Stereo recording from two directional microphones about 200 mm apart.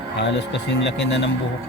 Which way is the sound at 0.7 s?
60° left (ahead or behind).